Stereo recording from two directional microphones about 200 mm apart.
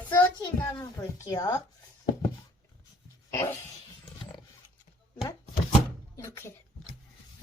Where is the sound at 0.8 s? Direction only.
15° left (ahead or behind).